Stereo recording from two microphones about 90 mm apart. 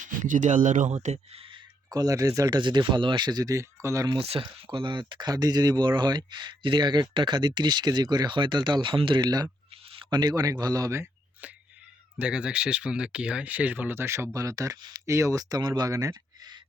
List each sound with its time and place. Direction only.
1.9 s speech: 40° right (ahead or behind)
2.6 s speech: 60° right (ahead or behind)
3.5 s speech: 35° right (ahead or behind)
4.1 s speech: 80° right; by 9.2 s 65° right (ahead or behind)
9.2 s a man's voice: 45° right (ahead or behind)
9.9 s a sound: 75° right (ahead or behind)
10.2 s a man's voice: 45° right (ahead or behind)
12.2 s speech: 10° right (ahead or behind); by 16.5 s 40° right (ahead or behind)